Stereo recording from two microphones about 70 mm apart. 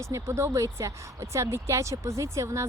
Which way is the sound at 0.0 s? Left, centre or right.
Right.